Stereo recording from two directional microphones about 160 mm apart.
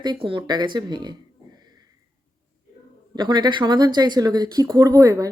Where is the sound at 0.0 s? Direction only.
30° right (ahead or behind).